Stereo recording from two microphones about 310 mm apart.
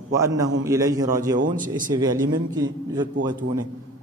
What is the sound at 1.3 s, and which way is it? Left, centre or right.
Speech, right.